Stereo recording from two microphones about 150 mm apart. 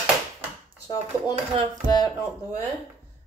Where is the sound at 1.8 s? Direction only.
25° left (ahead or behind).